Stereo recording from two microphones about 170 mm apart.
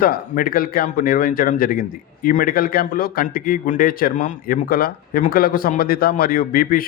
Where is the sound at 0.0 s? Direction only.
55° left (ahead or behind).